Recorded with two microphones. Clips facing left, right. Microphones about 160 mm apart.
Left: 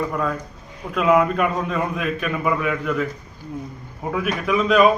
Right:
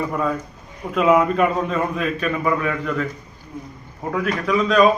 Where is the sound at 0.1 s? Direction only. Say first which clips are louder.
Right 2 dB; centre (ahead or behind).